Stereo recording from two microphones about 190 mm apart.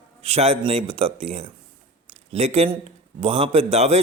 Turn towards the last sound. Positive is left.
turn(degrees=-35)  # may be behind; listen again after turning